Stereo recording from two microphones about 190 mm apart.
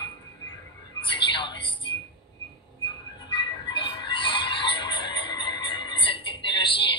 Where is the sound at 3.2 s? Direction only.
25° left (ahead or behind).